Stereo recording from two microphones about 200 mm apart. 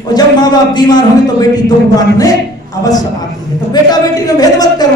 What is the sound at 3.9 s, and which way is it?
Speech, 20° left (ahead or behind).